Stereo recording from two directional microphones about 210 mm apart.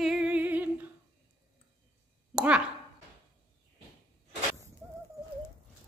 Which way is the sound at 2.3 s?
5° right (ahead or behind).